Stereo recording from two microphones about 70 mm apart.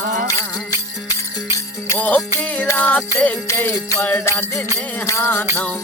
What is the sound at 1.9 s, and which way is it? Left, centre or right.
Music, left.